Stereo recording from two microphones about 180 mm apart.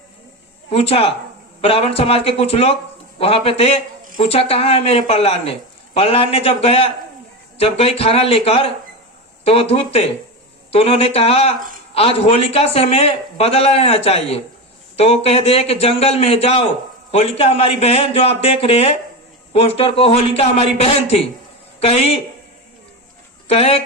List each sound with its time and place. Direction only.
0.7 s a man's voice: 35° left (ahead or behind)
23.5 s speech: 35° left (ahead or behind)